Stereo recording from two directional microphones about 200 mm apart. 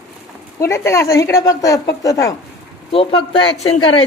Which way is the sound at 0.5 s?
15° left (ahead or behind).